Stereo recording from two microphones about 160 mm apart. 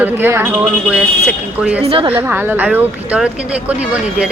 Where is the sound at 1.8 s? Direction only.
35° right (ahead or behind).